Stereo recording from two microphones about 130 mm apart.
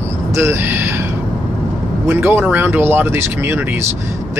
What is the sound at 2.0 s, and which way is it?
Speech, 15° right (ahead or behind).